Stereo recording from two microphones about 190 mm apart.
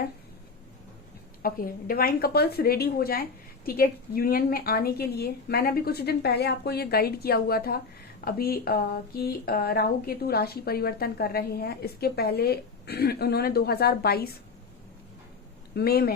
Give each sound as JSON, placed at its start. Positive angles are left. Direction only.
{"t": 1.4, "sound": "a woman's voice", "side_deg": 50}
{"t": 15.7, "sound": "speech", "side_deg": 55}